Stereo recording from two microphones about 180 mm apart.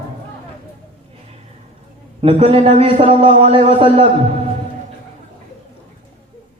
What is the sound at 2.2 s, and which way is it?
A man's voice, 30° right (ahead or behind).